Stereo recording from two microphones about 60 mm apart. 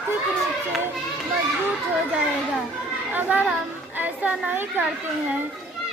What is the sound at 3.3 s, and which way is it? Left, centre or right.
A child's voice, right.